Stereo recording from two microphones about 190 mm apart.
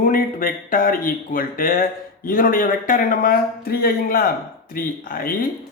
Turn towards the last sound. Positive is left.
turn(degrees=50)  # may be behind; listen again after turning